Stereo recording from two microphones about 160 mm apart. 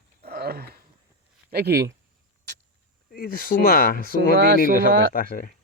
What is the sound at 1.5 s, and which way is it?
Speech, 85° right.